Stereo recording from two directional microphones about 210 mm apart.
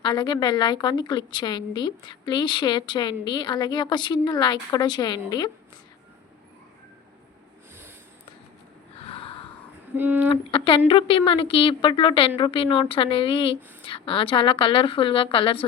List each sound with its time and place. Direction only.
0.0 s a woman's voice: 20° left (ahead or behind)
9.0 s gasp: 25° left (ahead or behind)
9.9 s speech: 10° right (ahead or behind)
10.2 s a woman's voice: 25° left (ahead or behind)